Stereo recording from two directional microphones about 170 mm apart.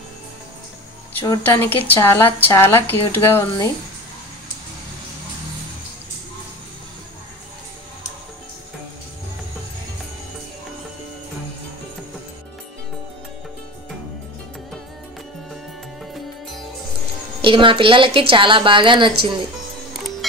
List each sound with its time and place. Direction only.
1.2 s a woman's voice: 15° left (ahead or behind)
17.4 s a woman's voice: 30° right (ahead or behind)